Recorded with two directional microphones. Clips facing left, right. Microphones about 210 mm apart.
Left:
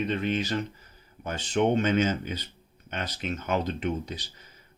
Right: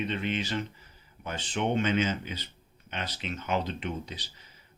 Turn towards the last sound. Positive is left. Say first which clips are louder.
# left 5 dB
turn(degrees=45)  # may be behind; listen again after turning